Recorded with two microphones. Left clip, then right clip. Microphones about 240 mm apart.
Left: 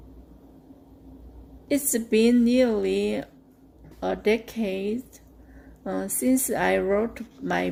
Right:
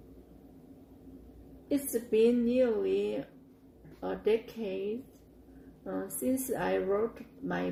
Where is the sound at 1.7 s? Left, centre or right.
Left.